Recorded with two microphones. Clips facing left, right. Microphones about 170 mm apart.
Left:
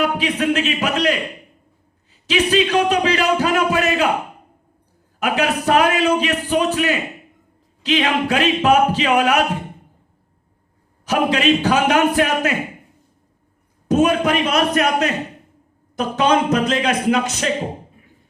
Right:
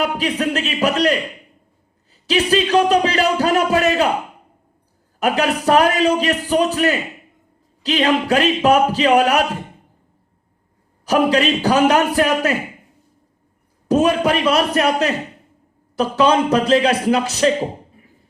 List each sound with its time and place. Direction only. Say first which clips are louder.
0.2 s speech: left 1 dB; 40° right (ahead or behind)
2.2 s speech: even; 35° right (ahead or behind)
5.2 s speech: right 2 dB; 35° right (ahead or behind)
11.0 s speech: right 2 dB; 35° right (ahead or behind)
13.8 s speech: right 1 dB; 35° right (ahead or behind)